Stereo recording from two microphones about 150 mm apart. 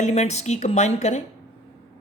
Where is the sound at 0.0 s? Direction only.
50° left (ahead or behind).